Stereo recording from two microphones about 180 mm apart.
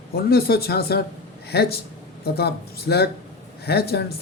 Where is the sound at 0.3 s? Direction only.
60° left (ahead or behind).